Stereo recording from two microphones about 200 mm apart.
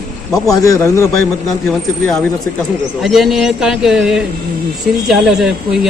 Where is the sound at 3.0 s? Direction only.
Centre (ahead or behind).